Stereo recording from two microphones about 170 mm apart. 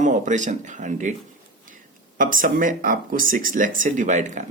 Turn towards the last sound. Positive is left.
turn(degrees=-45)  # may be behind; listen again after turning